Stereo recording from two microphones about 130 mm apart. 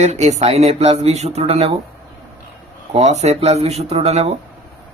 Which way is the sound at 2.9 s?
60° right (ahead or behind).